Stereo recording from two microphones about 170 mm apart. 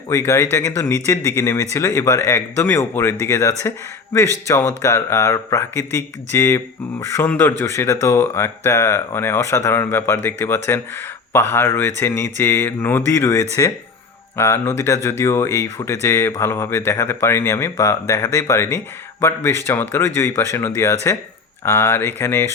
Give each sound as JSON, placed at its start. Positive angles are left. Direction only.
{"t": 0.1, "sound": "speech", "side_deg": 20}